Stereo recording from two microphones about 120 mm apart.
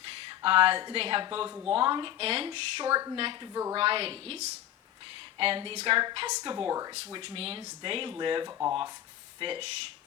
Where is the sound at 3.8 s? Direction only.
50° right (ahead or behind).